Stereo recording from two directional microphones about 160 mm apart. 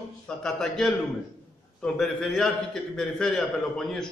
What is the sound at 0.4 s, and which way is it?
A man's voice, 5° left (ahead or behind).